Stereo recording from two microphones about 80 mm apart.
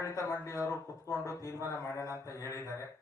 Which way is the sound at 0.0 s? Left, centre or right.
Left.